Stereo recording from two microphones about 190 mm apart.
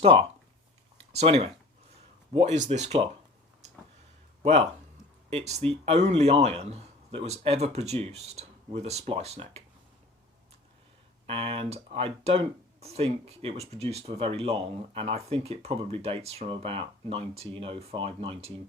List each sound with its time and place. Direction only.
0.0 s speech: 30° right (ahead or behind)
0.9 s a sound: 35° right (ahead or behind)
2.3 s speech: 35° right (ahead or behind)
4.4 s speech: 35° right (ahead or behind)
11.3 s speech: 30° right (ahead or behind)